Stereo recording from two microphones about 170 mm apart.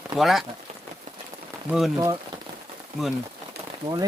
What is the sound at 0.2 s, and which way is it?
Speech, centre (ahead or behind).